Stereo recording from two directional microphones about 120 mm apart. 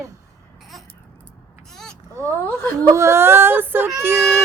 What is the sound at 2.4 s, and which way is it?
Speech, 15° left (ahead or behind).